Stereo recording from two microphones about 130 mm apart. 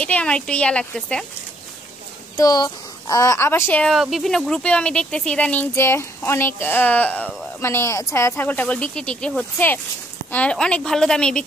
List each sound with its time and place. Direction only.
0.0 s speech: 10° left (ahead or behind)
2.3 s speech: 30° left (ahead or behind); by 3.9 s 15° left (ahead or behind)
3.9 s speech: centre (ahead or behind)